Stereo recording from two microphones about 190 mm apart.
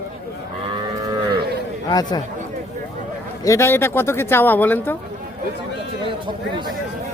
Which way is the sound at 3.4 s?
15° left (ahead or behind).